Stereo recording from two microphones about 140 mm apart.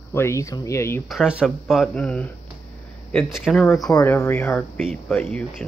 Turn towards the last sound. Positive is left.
turn(degrees=5)  # may be behind; listen again after turning